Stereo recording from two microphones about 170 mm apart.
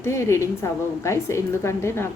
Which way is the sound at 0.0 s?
15° left (ahead or behind).